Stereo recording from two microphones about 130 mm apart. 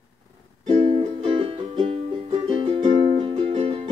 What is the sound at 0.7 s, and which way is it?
Music, 50° right (ahead or behind).